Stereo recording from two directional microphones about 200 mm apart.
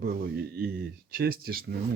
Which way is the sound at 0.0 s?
50° right (ahead or behind).